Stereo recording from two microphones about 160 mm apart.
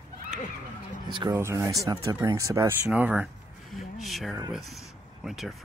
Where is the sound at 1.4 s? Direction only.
15° right (ahead or behind).